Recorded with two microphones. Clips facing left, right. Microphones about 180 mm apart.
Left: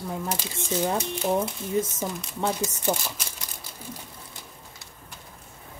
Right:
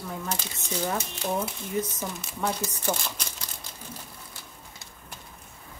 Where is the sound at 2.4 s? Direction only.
15° left (ahead or behind).